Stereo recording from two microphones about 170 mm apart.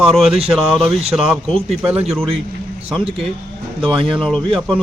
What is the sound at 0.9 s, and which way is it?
Speech, 35° right (ahead or behind).